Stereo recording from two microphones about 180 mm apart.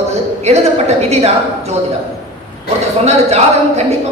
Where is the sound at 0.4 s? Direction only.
35° right (ahead or behind).